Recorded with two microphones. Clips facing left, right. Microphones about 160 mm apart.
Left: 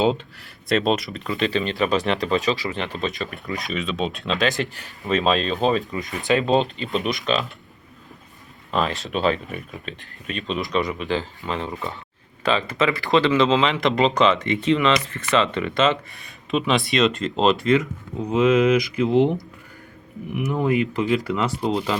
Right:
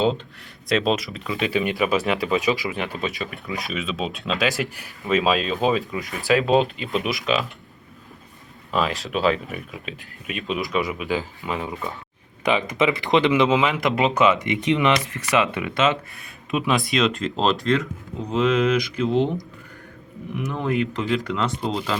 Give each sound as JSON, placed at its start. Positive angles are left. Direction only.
{"t": 0.7, "sound": "speech", "side_deg": 0}
{"t": 8.7, "sound": "speech", "side_deg": 0}
{"t": 12.4, "sound": "speech", "side_deg": -15}
{"t": 20.3, "sound": "speech", "side_deg": 10}